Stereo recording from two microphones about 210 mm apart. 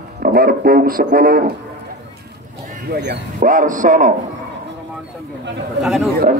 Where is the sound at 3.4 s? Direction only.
40° right (ahead or behind).